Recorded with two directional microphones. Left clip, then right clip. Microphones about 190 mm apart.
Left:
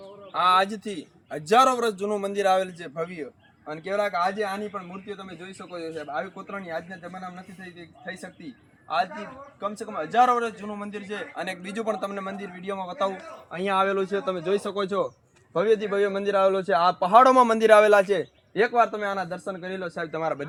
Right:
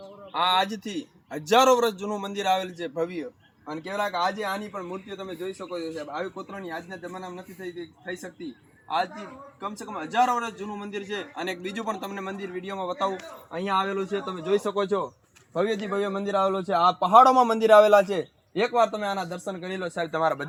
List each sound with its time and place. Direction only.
0.3 s a man's voice: 15° left (ahead or behind)
5.5 s a man's voice: 10° left (ahead or behind)
8.9 s a man's voice: 10° left (ahead or behind)
18.6 s speech: centre (ahead or behind)
19.1 s speech: 20° right (ahead or behind)